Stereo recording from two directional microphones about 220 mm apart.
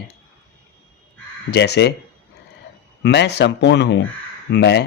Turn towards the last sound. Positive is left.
turn(degrees=50)  # may be behind; listen again after turning